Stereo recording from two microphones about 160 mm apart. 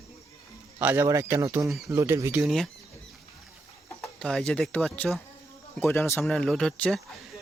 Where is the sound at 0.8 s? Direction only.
15° right (ahead or behind).